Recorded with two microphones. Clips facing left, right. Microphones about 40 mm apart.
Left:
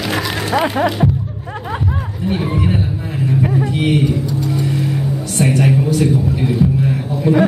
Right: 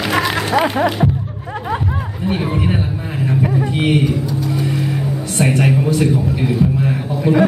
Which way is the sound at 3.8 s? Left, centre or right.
Centre.